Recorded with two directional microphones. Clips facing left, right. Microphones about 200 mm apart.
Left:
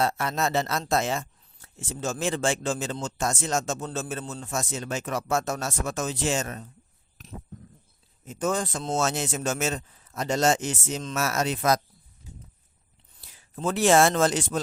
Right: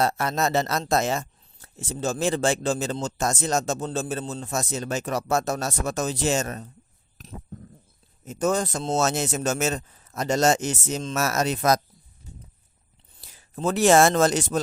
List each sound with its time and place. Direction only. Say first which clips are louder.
0.0 s speech: right 2 dB; 40° right (ahead or behind)
7.2 s a sound: right 2 dB; 35° right (ahead or behind)
8.2 s speech: right 3 dB; 40° right (ahead or behind)
13.2 s speech: right 3 dB; 40° right (ahead or behind)